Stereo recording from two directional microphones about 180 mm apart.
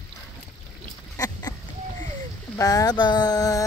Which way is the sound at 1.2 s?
20° left (ahead or behind).